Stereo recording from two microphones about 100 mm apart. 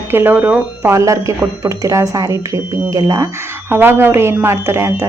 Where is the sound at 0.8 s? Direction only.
30° right (ahead or behind).